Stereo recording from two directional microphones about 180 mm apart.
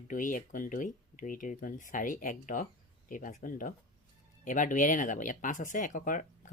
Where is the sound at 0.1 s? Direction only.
50° left (ahead or behind).